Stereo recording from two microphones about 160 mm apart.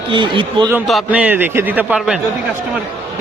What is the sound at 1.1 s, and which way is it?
A man's voice, 10° right (ahead or behind).